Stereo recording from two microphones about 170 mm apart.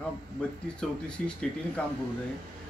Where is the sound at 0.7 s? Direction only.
5° left (ahead or behind).